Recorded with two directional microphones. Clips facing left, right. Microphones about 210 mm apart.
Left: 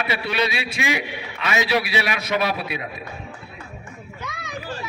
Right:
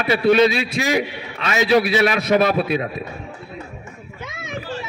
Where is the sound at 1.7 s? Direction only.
50° right (ahead or behind).